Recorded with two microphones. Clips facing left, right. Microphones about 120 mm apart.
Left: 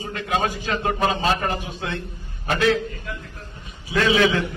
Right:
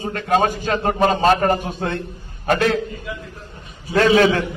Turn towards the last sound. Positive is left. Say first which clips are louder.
# right 4 dB
turn(degrees=-45)  # may be behind; listen again after turning